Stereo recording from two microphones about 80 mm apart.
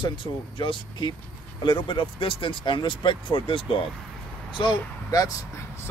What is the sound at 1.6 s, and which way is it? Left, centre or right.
Speech, left.